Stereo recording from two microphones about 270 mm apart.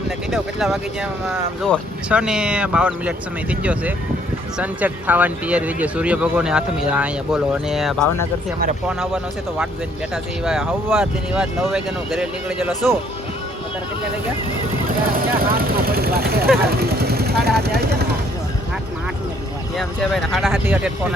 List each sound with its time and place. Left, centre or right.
0.3 s speech: centre
14.8 s speech: right
16.6 s vehicle: right
19.7 s speech: centre